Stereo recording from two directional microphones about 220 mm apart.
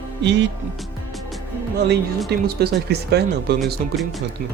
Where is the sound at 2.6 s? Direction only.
50° right (ahead or behind).